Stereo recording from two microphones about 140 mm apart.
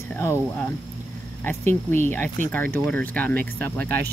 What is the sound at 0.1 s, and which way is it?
Speech, 15° left (ahead or behind).